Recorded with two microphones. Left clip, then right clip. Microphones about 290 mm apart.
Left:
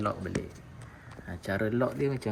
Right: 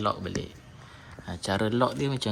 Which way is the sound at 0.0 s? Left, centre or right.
Centre.